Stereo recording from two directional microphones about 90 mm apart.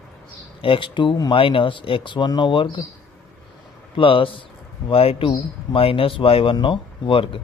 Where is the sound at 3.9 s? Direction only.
75° left (ahead or behind).